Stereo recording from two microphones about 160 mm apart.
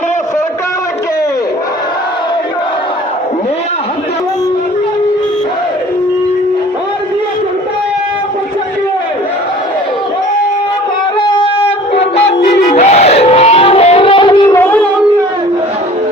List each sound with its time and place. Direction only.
11.3 s shofar: 35° left (ahead or behind)
12.7 s battle cry: 40° left (ahead or behind)
14.5 s singing: 10° left (ahead or behind)